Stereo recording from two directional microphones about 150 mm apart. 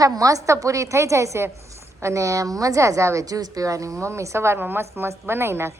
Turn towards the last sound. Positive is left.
turn(degrees=-15)  # may be behind; listen again after turning